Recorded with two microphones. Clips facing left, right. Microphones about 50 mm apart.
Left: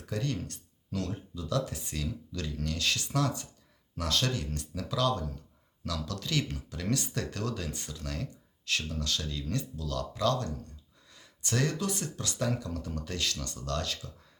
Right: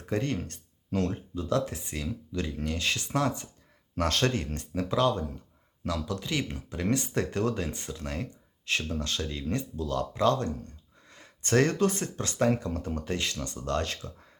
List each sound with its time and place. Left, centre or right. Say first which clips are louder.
0.0 s speech: right 4 dB; right
3.9 s speech: right 4 dB; right